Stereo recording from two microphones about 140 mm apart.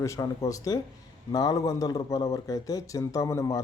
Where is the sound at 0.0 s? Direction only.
20° left (ahead or behind).